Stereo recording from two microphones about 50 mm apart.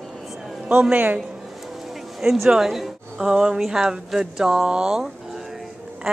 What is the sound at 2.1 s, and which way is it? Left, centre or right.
Speech, centre.